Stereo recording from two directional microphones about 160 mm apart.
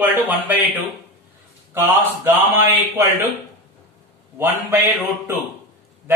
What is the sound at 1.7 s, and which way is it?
Speech, 15° right (ahead or behind).